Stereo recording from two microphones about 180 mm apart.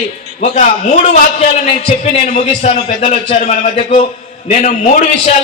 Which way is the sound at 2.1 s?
40° left (ahead or behind).